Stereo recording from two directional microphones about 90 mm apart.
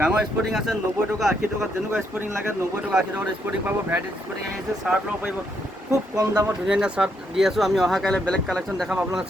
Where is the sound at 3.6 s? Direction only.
20° right (ahead or behind).